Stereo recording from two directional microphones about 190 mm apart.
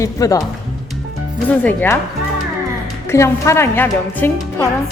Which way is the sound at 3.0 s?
15° left (ahead or behind).